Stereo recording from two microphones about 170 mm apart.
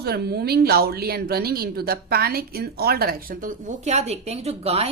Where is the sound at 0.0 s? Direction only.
70° right (ahead or behind).